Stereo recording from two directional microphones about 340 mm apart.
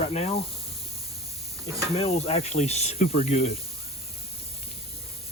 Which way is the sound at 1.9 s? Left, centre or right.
Centre.